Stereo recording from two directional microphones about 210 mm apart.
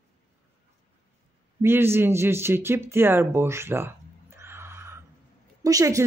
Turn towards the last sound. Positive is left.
turn(degrees=-15)  # may be behind; listen again after turning